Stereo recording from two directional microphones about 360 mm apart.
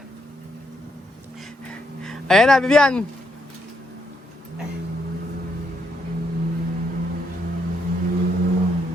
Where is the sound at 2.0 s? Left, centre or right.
Centre.